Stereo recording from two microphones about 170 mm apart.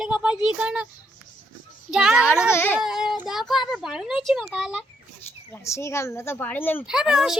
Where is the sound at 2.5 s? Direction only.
10° left (ahead or behind).